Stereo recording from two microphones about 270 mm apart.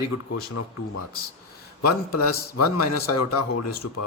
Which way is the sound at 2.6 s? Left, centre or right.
Left.